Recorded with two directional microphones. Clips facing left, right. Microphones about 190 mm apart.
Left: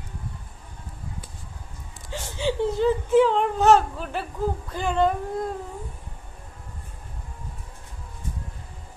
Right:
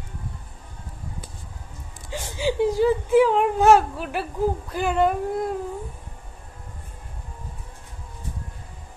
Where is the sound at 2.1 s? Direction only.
10° right (ahead or behind).